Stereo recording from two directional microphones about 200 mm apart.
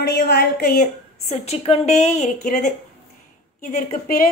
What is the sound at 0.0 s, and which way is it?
Speech, 55° left (ahead or behind).